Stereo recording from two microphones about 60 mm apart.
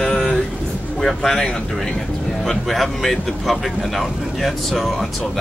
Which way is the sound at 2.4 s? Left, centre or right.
Centre.